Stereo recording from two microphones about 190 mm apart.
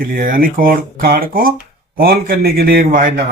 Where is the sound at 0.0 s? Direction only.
50° right (ahead or behind).